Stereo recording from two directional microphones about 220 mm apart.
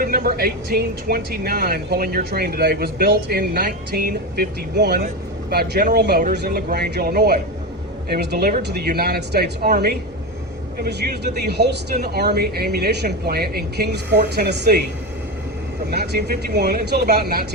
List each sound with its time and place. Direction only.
0.0 s speech: 40° right (ahead or behind)
15.9 s speech: 45° right (ahead or behind)